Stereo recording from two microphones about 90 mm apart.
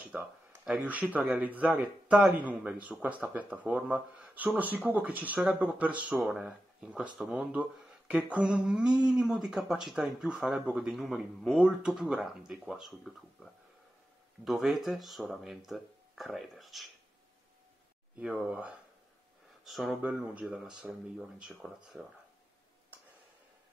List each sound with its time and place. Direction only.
0.1 s speech: 10° right (ahead or behind)
1.7 s speech: 5° right (ahead or behind)
18.2 s speech: 10° right (ahead or behind)
19.6 s speech: centre (ahead or behind)
20.0 s speech: 15° right (ahead or behind)